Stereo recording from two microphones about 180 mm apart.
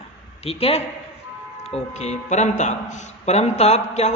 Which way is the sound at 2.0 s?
40° left (ahead or behind).